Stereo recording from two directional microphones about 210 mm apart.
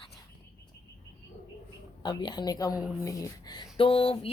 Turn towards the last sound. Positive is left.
turn(degrees=25)  # may be behind; listen again after turning